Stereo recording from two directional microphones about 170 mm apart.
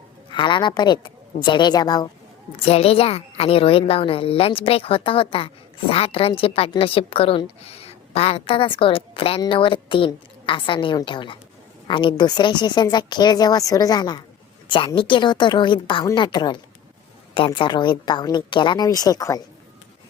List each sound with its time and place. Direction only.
0.3 s a woman's voice: 30° left (ahead or behind)
2.6 s a woman's voice: 35° left (ahead or behind)